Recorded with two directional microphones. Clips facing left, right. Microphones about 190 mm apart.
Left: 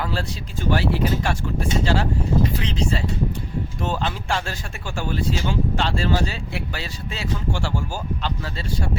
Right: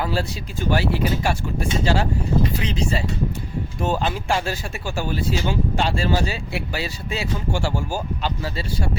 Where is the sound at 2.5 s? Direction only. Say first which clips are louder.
Even; 10° right (ahead or behind).